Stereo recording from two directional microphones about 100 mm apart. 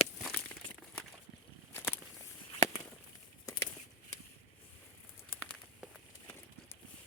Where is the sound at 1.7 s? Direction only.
20° left (ahead or behind).